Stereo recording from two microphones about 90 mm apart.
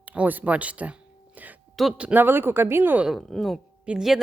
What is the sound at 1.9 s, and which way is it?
Speech, 15° right (ahead or behind).